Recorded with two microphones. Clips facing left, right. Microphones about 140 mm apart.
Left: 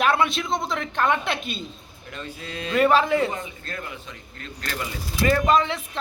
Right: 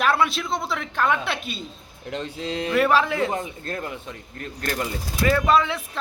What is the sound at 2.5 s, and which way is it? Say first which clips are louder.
Speech: right 4 dB; 70° right (ahead or behind).